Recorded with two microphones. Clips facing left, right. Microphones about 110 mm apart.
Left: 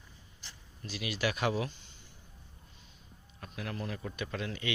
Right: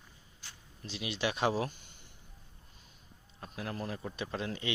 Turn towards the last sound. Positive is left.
turn(degrees=-30)  # may be behind; listen again after turning